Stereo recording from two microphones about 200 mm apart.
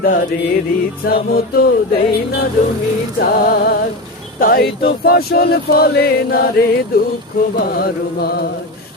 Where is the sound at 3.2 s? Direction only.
50° left (ahead or behind).